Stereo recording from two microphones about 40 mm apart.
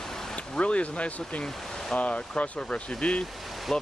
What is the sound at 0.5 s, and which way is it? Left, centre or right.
Speech, left.